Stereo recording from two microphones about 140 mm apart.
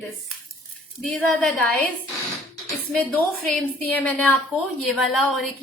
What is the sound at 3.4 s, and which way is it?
A woman's voice, 10° left (ahead or behind).